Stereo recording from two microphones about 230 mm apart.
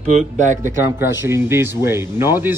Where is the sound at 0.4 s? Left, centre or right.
Right.